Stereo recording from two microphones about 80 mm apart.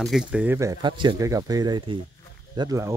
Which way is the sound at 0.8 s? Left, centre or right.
Right.